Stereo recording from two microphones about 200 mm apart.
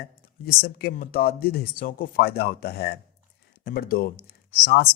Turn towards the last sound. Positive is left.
turn(degrees=50)  # may be behind; listen again after turning